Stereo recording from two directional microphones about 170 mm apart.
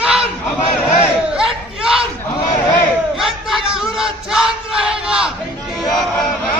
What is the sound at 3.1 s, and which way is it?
Crowd, centre (ahead or behind).